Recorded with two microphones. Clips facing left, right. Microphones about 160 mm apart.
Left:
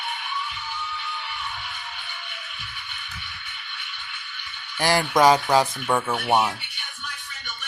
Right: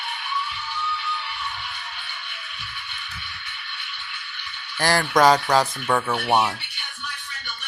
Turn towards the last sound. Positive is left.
turn(degrees=0)  # may be behind; listen again after turning